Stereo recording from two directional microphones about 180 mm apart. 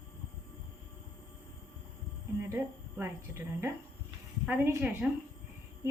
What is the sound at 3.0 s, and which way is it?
A woman's voice, 15° right (ahead or behind).